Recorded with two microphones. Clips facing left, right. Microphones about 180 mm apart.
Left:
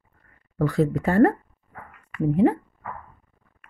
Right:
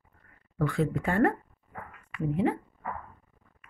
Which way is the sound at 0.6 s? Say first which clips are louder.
Left 6 dB; 40° left (ahead or behind).